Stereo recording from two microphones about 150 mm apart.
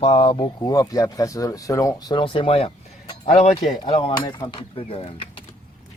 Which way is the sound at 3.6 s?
35° left (ahead or behind).